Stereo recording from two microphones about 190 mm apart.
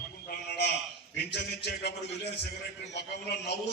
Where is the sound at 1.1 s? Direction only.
60° left (ahead or behind).